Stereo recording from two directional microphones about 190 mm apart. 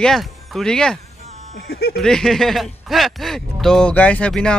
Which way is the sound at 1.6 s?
55° left (ahead or behind).